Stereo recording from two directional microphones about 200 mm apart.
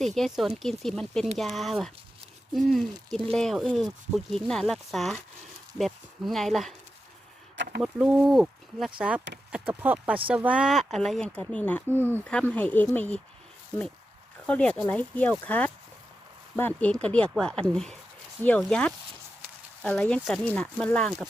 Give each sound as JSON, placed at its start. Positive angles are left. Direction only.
{"t": 0.0, "sound": "speech", "side_deg": 0}
{"t": 7.5, "sound": "a sound", "side_deg": -65}
{"t": 7.8, "sound": "speech", "side_deg": -5}
{"t": 14.4, "sound": "speech", "side_deg": 5}